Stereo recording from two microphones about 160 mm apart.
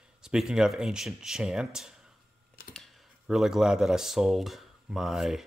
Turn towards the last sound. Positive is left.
turn(degrees=0)  # may be behind; listen again after turning